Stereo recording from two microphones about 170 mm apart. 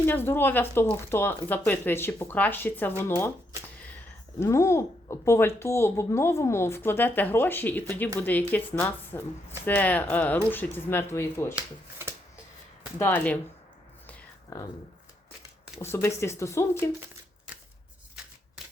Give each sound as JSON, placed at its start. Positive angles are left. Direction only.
{"t": 0.0, "sound": "speech", "side_deg": 10}
{"t": 4.4, "sound": "speech", "side_deg": 15}
{"t": 11.5, "sound": "speech", "side_deg": -15}
{"t": 13.0, "sound": "speech", "side_deg": 10}
{"t": 14.5, "sound": "speech", "side_deg": 15}
{"t": 15.8, "sound": "speech", "side_deg": 15}